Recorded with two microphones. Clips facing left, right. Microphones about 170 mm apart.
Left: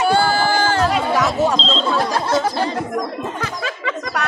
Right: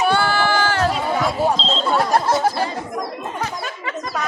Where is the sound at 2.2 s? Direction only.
80° left.